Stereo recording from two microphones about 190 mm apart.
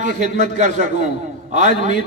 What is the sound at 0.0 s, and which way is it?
A man's voice, 40° right (ahead or behind).